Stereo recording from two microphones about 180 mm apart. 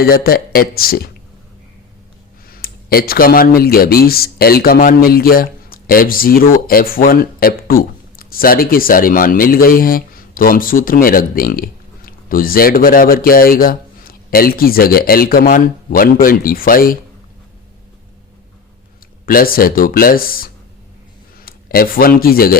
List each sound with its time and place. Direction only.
0.0 s speech: 55° left (ahead or behind)
2.5 s speech: 55° left (ahead or behind)
19.2 s speech: 55° left (ahead or behind)